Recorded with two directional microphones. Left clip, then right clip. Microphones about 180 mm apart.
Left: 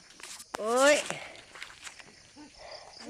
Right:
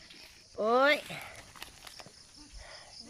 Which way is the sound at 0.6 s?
10° left (ahead or behind).